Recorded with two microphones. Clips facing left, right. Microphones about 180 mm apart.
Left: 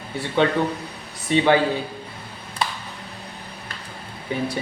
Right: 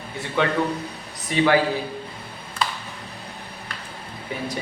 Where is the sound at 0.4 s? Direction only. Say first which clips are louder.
Left 1 dB; 25° left (ahead or behind).